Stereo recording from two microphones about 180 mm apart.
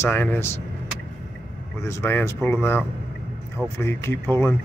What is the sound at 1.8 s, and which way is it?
Speech, 15° left (ahead or behind).